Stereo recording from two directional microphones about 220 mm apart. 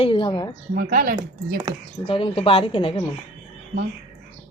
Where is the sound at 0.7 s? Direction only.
40° right (ahead or behind).